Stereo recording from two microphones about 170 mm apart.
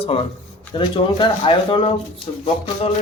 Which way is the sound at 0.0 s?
35° left (ahead or behind).